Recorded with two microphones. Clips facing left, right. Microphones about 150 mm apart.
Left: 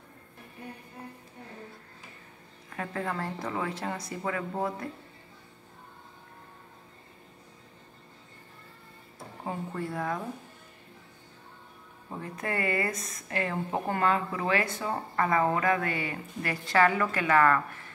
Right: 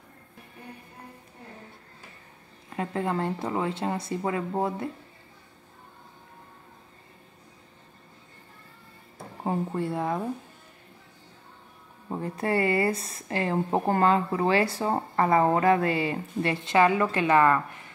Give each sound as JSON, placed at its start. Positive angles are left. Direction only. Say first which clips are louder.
{"t": 2.7, "sound": "speech", "louder": "right 5 dB", "side_deg": -25}
{"t": 9.4, "sound": "speech", "louder": "right 6 dB", "side_deg": -30}
{"t": 12.1, "sound": "speech", "louder": "right 7 dB", "side_deg": -30}